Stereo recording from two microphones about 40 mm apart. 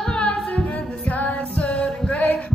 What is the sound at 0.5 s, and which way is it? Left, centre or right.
Music, left.